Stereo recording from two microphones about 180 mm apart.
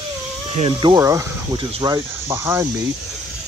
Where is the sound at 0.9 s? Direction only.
15° right (ahead or behind).